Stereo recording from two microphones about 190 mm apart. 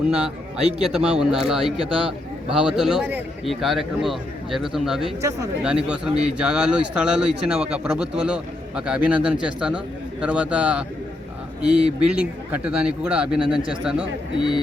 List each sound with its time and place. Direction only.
0.6 s a man's voice: 30° right (ahead or behind)
1.0 s speech: 5° right (ahead or behind)
1.7 s speech: 30° right (ahead or behind)
2.5 s speech: 5° right (ahead or behind)